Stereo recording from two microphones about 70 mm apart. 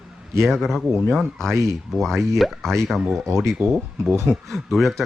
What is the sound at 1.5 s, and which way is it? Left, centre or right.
Speech, right.